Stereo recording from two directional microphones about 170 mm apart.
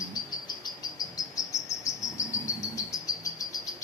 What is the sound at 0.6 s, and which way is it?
Cricket, 20° left (ahead or behind).